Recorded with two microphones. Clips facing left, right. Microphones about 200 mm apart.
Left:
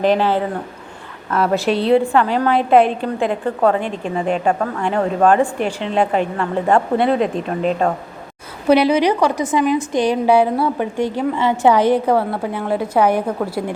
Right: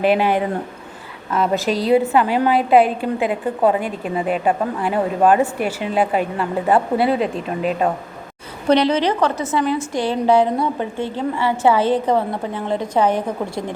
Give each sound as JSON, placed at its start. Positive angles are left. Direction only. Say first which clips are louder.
{"t": 0.0, "sound": "a woman's voice", "louder": "left 1 dB", "side_deg": -10}
{"t": 1.3, "sound": "a woman's voice", "louder": "left 2 dB", "side_deg": 0}
{"t": 8.6, "sound": "a woman's voice", "louder": "left 2 dB", "side_deg": 10}